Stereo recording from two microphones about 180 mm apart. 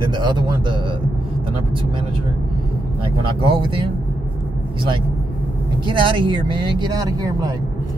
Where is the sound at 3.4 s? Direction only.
30° right (ahead or behind).